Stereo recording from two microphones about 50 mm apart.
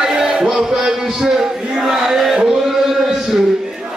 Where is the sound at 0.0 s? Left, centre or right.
Centre.